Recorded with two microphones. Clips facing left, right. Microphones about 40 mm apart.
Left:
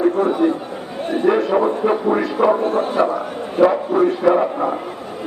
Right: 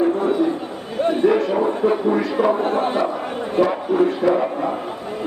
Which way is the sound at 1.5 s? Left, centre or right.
Left.